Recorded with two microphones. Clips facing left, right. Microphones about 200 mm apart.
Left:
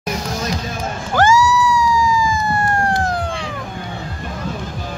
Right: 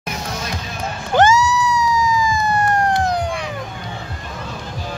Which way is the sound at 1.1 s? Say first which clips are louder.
Even; 20° right (ahead or behind).